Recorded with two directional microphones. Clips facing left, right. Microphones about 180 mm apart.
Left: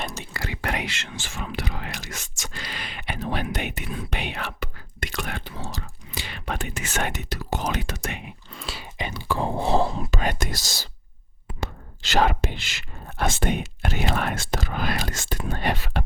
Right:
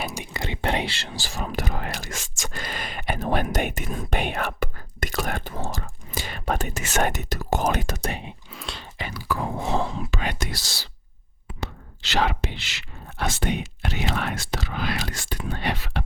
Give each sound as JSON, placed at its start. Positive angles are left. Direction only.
{"t": 0.0, "sound": "whispering", "side_deg": -15}
{"t": 0.4, "sound": "whispering", "side_deg": -25}
{"t": 2.4, "sound": "speech", "side_deg": -50}
{"t": 8.4, "sound": "dog", "side_deg": 0}
{"t": 9.0, "sound": "speech", "side_deg": 20}
{"t": 11.6, "sound": "whispering", "side_deg": 45}
{"t": 13.4, "sound": "speech", "side_deg": 50}